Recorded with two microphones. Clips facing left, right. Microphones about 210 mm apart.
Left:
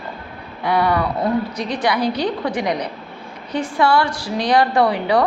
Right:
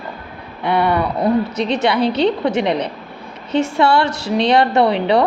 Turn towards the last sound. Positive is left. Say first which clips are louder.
# right 2 dB
turn(degrees=-25)  # may be behind; listen again after turning